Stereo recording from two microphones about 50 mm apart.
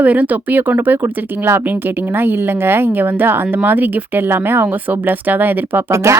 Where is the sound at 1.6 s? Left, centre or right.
Right.